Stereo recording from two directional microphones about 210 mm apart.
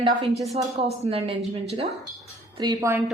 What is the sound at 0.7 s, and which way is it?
A woman's voice, 30° right (ahead or behind).